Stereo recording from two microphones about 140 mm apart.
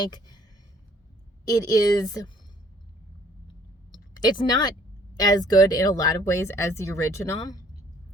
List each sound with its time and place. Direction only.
0.0 s speech: 30° left (ahead or behind)
1.5 s speech: 25° left (ahead or behind)
3.9 s a sound: 30° left (ahead or behind)
5.1 s speech: 30° left (ahead or behind)